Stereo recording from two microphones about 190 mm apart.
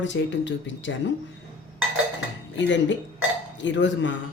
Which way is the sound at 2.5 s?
75° left (ahead or behind).